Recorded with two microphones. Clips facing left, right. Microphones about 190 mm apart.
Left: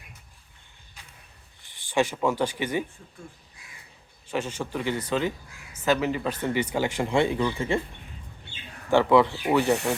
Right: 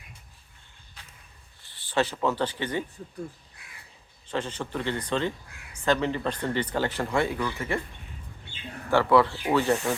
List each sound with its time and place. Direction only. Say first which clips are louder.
1.6 s speech: left 2 dB; 15° left (ahead or behind)
3.6 s crow: even; 60° right (ahead or behind)
4.3 s speech: left 1 dB; 10° left (ahead or behind)
8.9 s speech: left 2 dB; 20° left (ahead or behind)